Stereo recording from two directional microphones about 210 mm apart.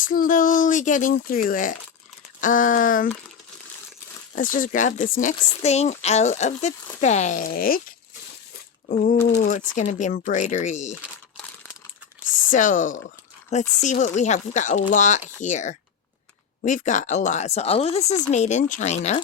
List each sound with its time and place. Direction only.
0.0 s speech: 40° left (ahead or behind)
4.4 s speech: 40° left (ahead or behind)
8.9 s speech: 35° left (ahead or behind)
12.5 s speech: 40° left (ahead or behind)